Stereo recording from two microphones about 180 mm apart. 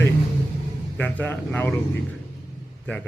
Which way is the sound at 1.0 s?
10° left (ahead or behind).